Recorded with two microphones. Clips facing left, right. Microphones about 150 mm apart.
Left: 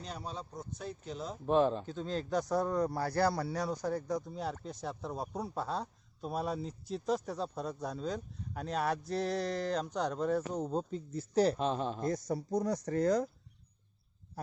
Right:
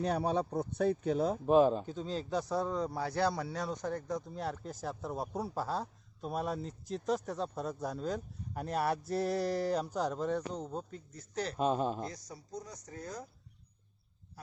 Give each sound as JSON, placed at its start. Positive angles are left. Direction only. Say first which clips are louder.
{"t": 0.0, "sound": "speech", "louder": "right 11 dB", "side_deg": -65}
{"t": 1.5, "sound": "speech", "louder": "right 2 dB", "side_deg": -10}
{"t": 10.7, "sound": "speech", "louder": "left 6 dB", "side_deg": 25}
{"t": 11.5, "sound": "speech", "louder": "right 2 dB", "side_deg": -10}
{"t": 12.0, "sound": "speech", "louder": "left 11 dB", "side_deg": 55}